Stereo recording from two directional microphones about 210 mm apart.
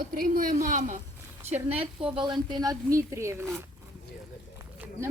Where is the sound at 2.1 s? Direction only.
20° right (ahead or behind).